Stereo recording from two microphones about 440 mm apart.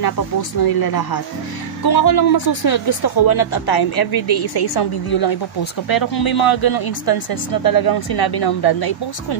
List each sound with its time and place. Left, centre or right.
0.0 s speech: left